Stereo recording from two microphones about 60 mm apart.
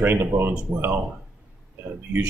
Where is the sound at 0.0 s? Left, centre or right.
Right.